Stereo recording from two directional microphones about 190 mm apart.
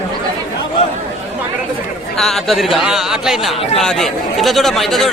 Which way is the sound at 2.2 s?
Centre (ahead or behind).